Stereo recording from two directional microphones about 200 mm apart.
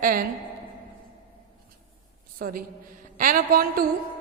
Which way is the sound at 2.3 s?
45° right (ahead or behind).